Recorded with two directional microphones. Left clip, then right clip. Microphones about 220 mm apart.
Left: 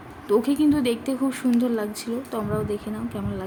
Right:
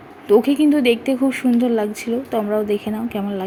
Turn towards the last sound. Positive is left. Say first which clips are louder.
# right 8 dB
turn(degrees=-20)  # may be behind; listen again after turning